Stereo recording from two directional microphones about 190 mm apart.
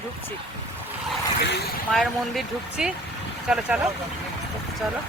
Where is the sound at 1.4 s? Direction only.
60° left (ahead or behind).